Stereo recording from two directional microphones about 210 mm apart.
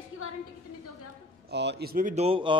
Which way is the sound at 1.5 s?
50° right (ahead or behind).